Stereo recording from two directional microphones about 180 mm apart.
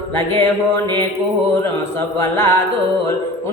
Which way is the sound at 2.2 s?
15° left (ahead or behind).